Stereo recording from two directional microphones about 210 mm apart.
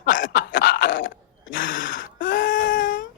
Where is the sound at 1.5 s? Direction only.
40° left (ahead or behind).